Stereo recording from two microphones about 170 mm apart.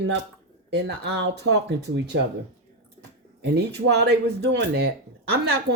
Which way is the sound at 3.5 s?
75° right (ahead or behind).